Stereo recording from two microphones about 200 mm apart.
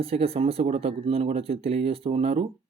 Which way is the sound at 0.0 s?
30° right (ahead or behind).